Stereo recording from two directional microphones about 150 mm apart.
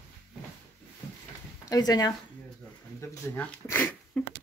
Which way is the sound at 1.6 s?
25° left (ahead or behind).